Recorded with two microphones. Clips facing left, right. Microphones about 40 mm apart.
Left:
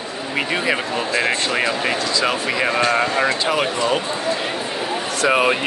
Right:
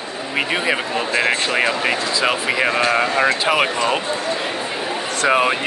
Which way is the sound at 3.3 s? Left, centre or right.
Right.